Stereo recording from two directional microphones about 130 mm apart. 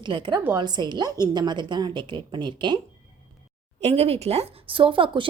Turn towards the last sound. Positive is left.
turn(degrees=-40)  # may be behind; listen again after turning